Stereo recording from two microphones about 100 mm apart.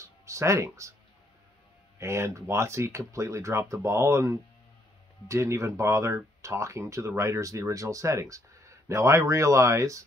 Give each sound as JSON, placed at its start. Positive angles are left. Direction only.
{"t": 0.0, "sound": "music", "side_deg": -30}
{"t": 2.0, "sound": "speech", "side_deg": -30}